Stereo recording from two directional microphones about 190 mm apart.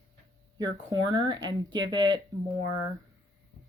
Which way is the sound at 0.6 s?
20° right (ahead or behind).